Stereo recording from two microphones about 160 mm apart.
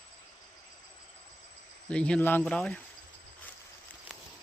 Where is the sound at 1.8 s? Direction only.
5° left (ahead or behind).